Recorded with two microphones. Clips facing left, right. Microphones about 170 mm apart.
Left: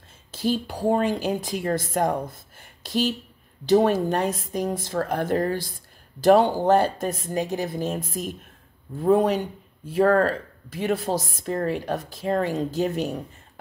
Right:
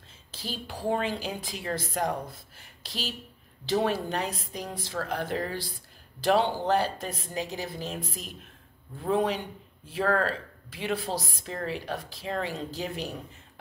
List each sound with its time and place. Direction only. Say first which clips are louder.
0.3 s speech: left 12 dB; 50° left (ahead or behind)